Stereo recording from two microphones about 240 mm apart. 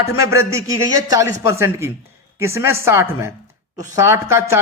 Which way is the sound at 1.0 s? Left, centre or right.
Centre.